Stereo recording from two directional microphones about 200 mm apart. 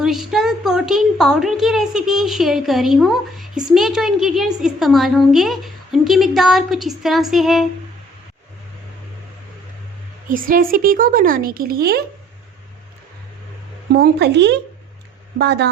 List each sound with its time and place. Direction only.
0.0 s a woman's voice: centre (ahead or behind)
10.2 s a woman's voice: 45° right (ahead or behind)
13.9 s a woman's voice: 55° right (ahead or behind)